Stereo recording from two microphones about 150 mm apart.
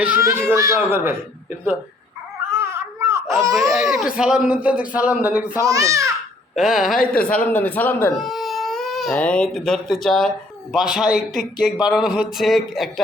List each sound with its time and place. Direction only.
0.2 s a child's voice: 20° right (ahead or behind)
2.5 s a sound: 20° right (ahead or behind)
3.7 s speech: centre (ahead or behind)
5.6 s a child's voice: 20° right (ahead or behind)
6.6 s speech: centre (ahead or behind)
7.0 s speech: 75° left (ahead or behind)
7.3 s a man's voice: 10° left (ahead or behind)
8.1 s baby cry: centre (ahead or behind)
9.1 s speech: 10° left (ahead or behind)